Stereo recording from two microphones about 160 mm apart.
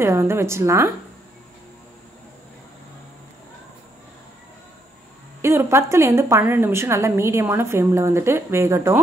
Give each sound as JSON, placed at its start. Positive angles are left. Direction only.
{"t": 0.0, "sound": "a woman's voice", "side_deg": -15}
{"t": 5.4, "sound": "a woman's voice", "side_deg": -15}